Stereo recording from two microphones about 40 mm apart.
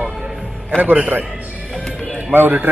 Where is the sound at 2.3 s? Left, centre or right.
Right.